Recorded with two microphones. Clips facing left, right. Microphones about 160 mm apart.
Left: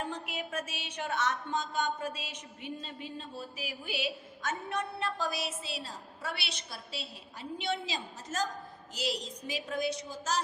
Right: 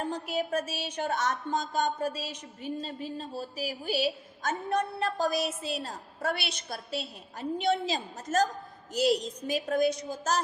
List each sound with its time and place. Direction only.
0.0 s a woman's voice: 40° right (ahead or behind)